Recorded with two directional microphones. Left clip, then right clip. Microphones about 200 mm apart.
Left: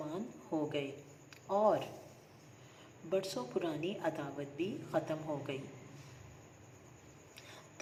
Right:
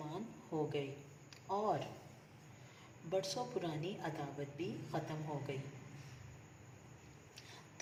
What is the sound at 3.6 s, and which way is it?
Speech, 15° left (ahead or behind).